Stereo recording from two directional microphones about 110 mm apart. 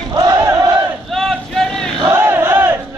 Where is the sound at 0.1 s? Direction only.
35° right (ahead or behind).